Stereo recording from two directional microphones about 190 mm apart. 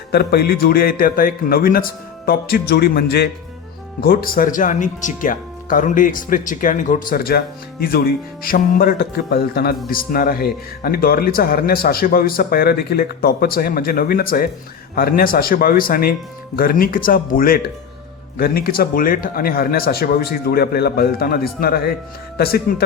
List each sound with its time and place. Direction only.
0.1 s speech: 60° left (ahead or behind)